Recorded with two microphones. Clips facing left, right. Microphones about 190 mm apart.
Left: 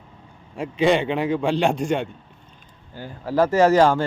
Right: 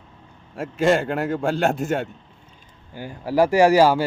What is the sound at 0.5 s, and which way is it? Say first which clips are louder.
Speech: even; centre (ahead or behind).